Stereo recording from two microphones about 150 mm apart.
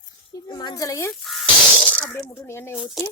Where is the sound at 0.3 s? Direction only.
25° left (ahead or behind).